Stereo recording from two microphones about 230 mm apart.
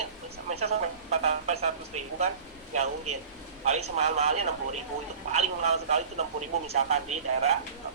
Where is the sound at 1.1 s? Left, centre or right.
Right.